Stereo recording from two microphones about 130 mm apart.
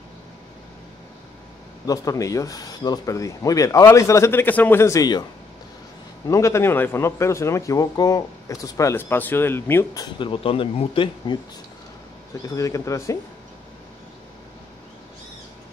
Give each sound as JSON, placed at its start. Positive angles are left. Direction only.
{"t": 1.9, "sound": "speech", "side_deg": 25}
{"t": 6.2, "sound": "speech", "side_deg": 25}
{"t": 9.9, "sound": "speech", "side_deg": 40}
{"t": 12.4, "sound": "speech", "side_deg": 25}